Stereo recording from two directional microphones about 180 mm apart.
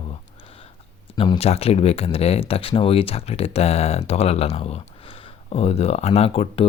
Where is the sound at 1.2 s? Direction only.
30° left (ahead or behind).